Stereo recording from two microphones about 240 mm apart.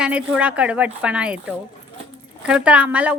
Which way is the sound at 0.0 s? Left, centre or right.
Centre.